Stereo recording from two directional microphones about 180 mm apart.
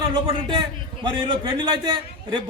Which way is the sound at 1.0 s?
30° right (ahead or behind).